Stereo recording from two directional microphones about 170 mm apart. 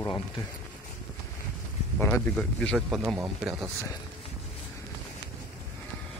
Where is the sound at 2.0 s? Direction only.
10° left (ahead or behind).